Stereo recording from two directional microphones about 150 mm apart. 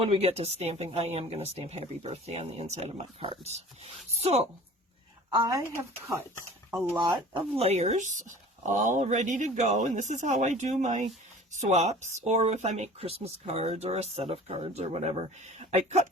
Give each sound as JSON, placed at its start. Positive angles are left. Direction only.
{"t": 0.0, "sound": "speech", "side_deg": -40}
{"t": 5.3, "sound": "speech", "side_deg": -25}
{"t": 6.9, "sound": "speech", "side_deg": -25}
{"t": 7.5, "sound": "speech", "side_deg": -45}